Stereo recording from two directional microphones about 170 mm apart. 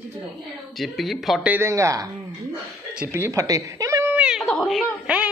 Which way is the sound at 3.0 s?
15° right (ahead or behind).